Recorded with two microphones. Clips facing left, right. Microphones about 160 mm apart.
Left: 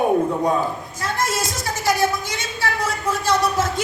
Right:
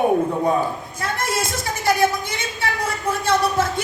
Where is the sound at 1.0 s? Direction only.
55° right (ahead or behind).